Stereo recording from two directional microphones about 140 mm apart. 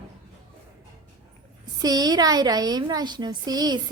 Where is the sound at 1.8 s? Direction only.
30° right (ahead or behind).